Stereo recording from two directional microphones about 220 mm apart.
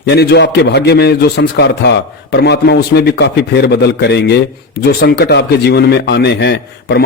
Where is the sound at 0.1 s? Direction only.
50° left (ahead or behind).